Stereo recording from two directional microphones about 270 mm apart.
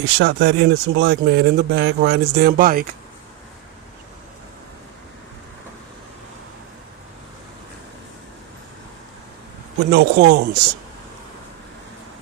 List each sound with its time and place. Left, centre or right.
0.0 s speech: right
9.9 s speech: right